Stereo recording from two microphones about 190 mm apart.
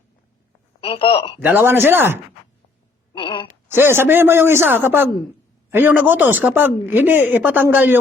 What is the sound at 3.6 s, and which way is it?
Speech, 10° right (ahead or behind).